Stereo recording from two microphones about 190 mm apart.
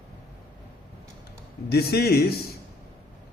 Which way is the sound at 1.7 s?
55° left (ahead or behind).